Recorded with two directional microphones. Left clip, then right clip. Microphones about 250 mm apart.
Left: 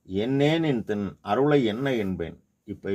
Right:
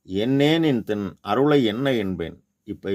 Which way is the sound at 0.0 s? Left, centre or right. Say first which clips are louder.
Right 3 dB; right.